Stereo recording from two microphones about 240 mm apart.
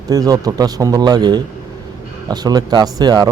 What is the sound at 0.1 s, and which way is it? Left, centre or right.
Speech, centre.